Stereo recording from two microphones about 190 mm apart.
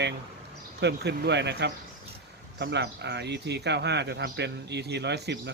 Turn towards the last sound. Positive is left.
turn(degrees=-65)  # may be behind; listen again after turning